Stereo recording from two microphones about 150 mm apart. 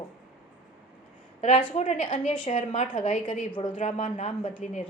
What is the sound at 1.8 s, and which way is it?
A woman's voice, 45° left (ahead or behind).